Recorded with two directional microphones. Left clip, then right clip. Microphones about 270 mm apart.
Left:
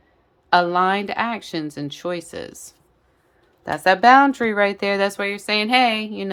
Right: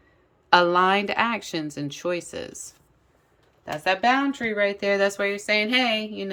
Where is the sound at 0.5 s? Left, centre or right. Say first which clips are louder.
Left 1 dB; centre.